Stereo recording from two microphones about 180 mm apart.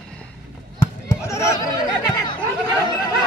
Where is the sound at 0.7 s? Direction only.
20° left (ahead or behind).